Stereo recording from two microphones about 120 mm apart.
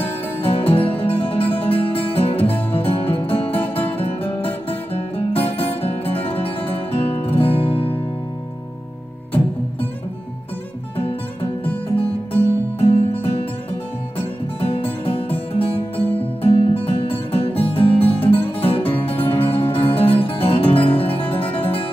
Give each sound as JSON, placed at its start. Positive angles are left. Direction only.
{"t": 0.0, "sound": "music", "side_deg": 50}
{"t": 4.6, "sound": "music", "side_deg": 55}
{"t": 12.3, "sound": "music", "side_deg": 55}